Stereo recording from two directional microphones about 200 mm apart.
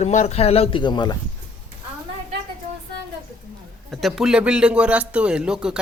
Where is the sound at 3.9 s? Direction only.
Centre (ahead or behind).